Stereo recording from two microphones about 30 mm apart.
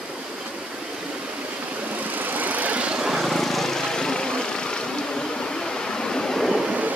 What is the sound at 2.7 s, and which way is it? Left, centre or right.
Vehicle, right.